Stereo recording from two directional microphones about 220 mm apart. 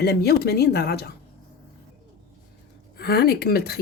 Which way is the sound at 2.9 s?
45° left (ahead or behind).